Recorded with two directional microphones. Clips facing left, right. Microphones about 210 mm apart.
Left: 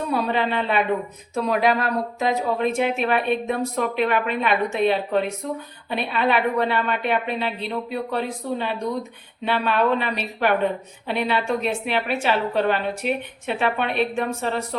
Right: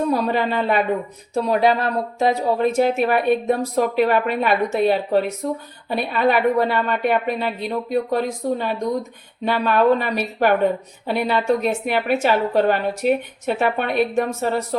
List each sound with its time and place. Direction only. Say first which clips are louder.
0.1 s a woman's voice: right 3 dB; 40° right (ahead or behind)
1.4 s a woman's voice: right 3 dB; 30° right (ahead or behind)